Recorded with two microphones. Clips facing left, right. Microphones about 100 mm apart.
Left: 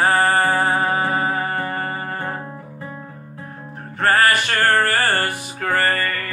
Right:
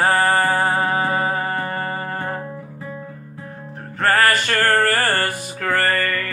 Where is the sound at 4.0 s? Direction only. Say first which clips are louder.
Even; 40° right (ahead or behind).